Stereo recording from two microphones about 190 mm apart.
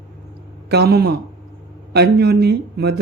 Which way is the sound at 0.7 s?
55° right (ahead or behind).